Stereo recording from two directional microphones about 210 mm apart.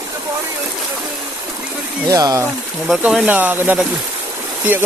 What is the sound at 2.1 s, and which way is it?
Speech, 15° right (ahead or behind).